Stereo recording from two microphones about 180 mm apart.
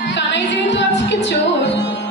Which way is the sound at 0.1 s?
75° left (ahead or behind).